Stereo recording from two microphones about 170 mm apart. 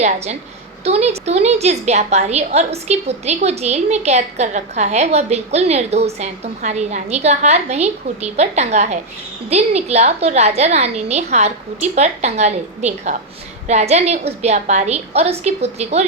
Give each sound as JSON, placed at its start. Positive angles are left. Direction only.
{"t": 0.9, "sound": "a woman's voice", "side_deg": -40}